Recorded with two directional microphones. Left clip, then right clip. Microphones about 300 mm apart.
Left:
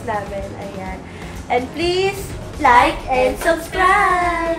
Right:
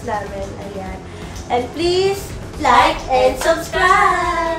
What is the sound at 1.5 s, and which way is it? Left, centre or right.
Speech, centre.